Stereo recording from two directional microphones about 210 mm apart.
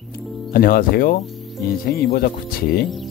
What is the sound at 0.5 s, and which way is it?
Speech, 45° left (ahead or behind).